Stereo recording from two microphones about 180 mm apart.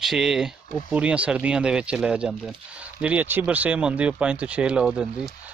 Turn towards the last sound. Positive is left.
turn(degrees=-5)  # may be behind; listen again after turning